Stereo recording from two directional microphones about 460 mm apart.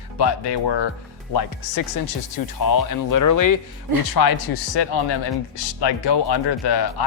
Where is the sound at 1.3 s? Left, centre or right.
Left.